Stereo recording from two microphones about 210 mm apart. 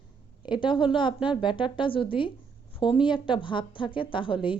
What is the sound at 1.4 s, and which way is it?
A woman's voice, 20° left (ahead or behind).